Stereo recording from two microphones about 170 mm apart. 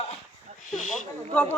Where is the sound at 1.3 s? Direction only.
5° left (ahead or behind).